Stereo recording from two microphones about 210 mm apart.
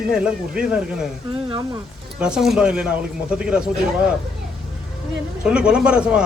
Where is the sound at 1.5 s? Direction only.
20° right (ahead or behind).